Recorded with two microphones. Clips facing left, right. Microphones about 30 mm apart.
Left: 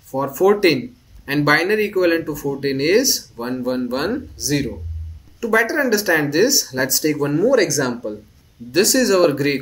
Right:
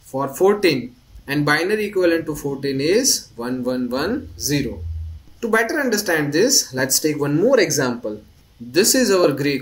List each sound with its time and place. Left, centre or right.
0.1 s speech: centre